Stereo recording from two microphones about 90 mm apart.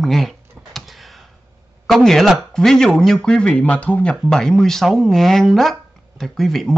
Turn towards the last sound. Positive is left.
turn(degrees=5)  # may be behind; listen again after turning